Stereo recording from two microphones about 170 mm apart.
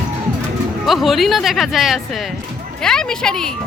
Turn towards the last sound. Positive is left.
turn(degrees=5)  # may be behind; listen again after turning